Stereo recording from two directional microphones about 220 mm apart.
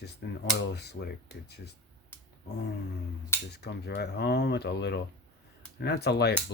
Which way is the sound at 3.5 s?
50° left (ahead or behind).